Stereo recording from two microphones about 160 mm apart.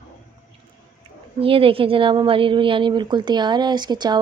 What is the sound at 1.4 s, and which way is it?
A woman's voice, 35° right (ahead or behind).